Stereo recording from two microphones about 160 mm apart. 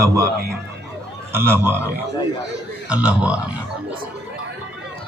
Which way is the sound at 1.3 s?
15° right (ahead or behind).